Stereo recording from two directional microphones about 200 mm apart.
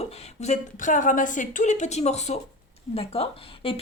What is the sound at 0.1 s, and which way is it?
A woman's voice, 35° left (ahead or behind).